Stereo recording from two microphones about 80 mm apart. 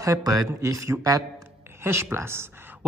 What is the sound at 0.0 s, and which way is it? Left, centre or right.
Speech, right.